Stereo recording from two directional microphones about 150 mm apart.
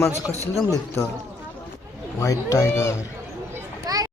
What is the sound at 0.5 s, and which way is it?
Speech, 20° left (ahead or behind).